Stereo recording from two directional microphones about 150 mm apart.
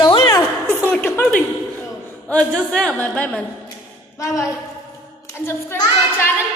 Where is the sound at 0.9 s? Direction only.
15° left (ahead or behind).